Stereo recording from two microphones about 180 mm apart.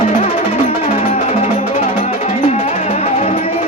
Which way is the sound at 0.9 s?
40° left (ahead or behind).